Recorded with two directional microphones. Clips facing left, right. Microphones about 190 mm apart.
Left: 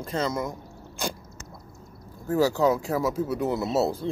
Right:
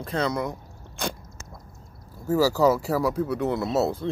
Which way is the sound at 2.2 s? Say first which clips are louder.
Right 2 dB; 5° right (ahead or behind).